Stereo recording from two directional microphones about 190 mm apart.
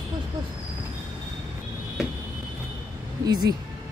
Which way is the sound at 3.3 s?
20° right (ahead or behind).